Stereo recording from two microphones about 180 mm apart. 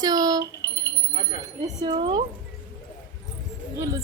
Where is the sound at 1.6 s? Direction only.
25° right (ahead or behind).